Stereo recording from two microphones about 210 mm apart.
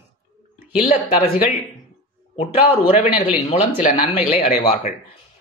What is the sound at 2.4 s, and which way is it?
A man's voice, 25° left (ahead or behind).